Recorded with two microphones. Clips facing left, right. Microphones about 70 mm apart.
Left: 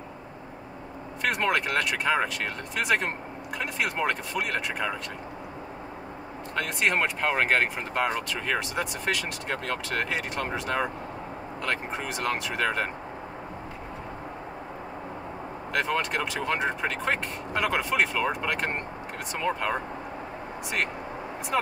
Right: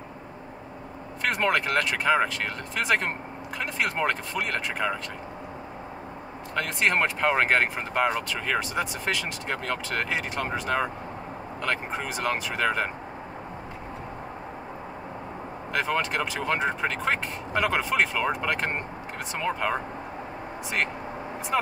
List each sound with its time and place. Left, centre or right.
1.2 s speech: centre
6.5 s speech: centre
15.7 s speech: centre